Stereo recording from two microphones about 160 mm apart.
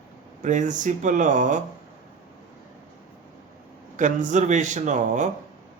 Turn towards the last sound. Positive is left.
turn(degrees=-50)  # may be behind; listen again after turning